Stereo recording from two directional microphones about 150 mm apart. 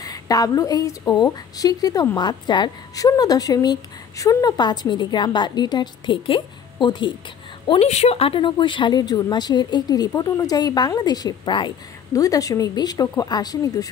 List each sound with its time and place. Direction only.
0.0 s speech: 25° left (ahead or behind)